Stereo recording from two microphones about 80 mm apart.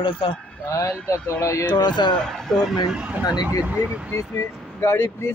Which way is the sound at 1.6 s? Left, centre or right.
Left.